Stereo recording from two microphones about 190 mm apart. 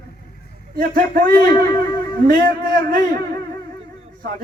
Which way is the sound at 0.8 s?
50° right (ahead or behind).